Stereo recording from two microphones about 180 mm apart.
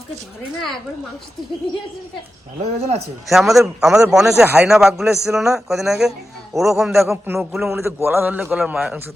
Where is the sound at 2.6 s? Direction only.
35° right (ahead or behind).